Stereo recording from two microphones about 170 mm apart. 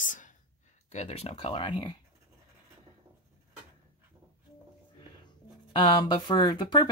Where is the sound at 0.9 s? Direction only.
35° left (ahead or behind).